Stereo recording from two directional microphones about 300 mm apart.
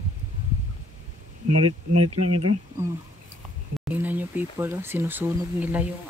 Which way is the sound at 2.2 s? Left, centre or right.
Right.